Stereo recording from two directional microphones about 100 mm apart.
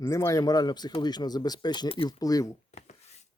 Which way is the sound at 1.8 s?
60° left (ahead or behind).